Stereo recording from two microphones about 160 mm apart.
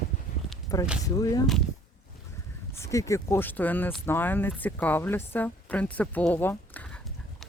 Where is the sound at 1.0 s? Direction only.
20° left (ahead or behind).